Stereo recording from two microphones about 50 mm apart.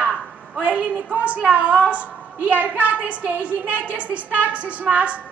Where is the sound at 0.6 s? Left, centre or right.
Right.